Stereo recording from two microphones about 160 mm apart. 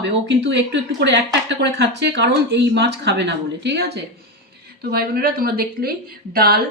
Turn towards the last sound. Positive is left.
turn(degrees=-70)  # may be behind; listen again after turning